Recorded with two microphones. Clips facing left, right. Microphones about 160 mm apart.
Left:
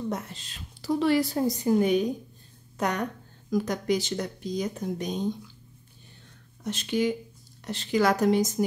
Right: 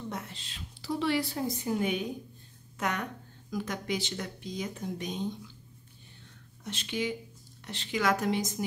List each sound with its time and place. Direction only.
0.1 s a woman's voice: 45° left (ahead or behind)
6.6 s a woman's voice: 40° left (ahead or behind)